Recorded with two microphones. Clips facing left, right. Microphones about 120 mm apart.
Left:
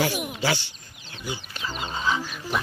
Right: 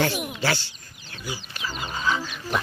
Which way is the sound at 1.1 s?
20° left (ahead or behind).